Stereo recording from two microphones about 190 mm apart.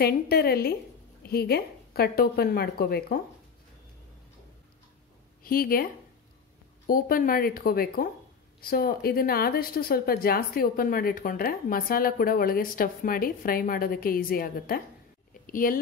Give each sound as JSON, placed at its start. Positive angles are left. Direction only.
{"t": 0.0, "sound": "a woman's voice", "side_deg": 55}
{"t": 5.4, "sound": "speech", "side_deg": 50}
{"t": 6.9, "sound": "a woman's voice", "side_deg": 50}